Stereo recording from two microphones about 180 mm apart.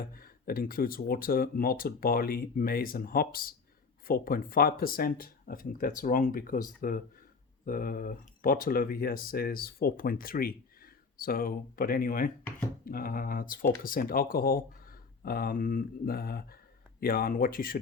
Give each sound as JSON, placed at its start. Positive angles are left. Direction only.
{"t": 0.0, "sound": "speech", "side_deg": 55}